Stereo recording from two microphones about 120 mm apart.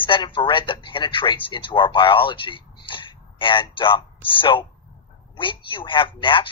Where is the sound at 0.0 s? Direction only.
45° left (ahead or behind).